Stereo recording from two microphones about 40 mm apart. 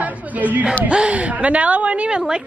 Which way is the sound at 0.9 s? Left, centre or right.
Right.